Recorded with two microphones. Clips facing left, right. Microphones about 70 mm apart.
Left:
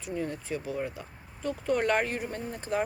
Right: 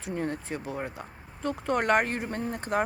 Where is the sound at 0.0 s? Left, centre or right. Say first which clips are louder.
Right 2 dB; right.